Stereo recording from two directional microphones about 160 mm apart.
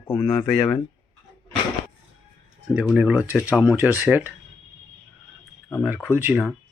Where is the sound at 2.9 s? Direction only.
10° right (ahead or behind).